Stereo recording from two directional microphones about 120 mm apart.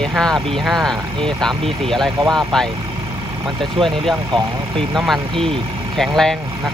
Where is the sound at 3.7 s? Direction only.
5° left (ahead or behind).